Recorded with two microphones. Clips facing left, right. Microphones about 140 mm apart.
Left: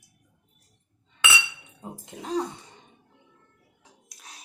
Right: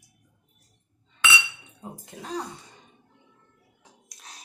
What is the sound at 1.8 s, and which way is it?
Speech, 20° left (ahead or behind).